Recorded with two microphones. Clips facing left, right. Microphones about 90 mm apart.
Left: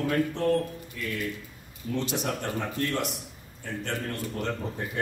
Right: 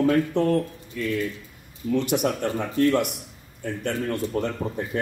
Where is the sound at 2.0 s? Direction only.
60° right (ahead or behind).